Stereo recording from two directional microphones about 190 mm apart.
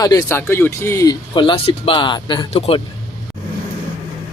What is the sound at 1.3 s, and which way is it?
Speech, 25° left (ahead or behind).